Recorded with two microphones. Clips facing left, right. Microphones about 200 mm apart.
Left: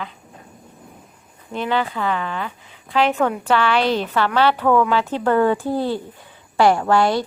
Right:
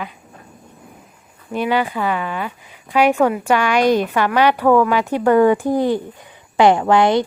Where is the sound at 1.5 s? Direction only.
15° right (ahead or behind).